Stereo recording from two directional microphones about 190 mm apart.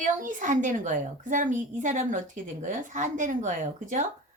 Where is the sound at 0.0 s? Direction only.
45° right (ahead or behind).